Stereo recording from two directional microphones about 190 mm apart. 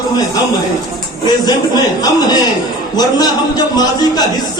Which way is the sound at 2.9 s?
20° left (ahead or behind).